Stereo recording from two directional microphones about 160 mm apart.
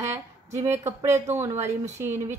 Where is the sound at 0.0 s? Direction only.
15° right (ahead or behind).